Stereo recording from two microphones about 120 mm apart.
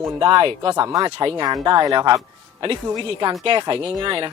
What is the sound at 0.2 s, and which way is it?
Speech, 45° right (ahead or behind).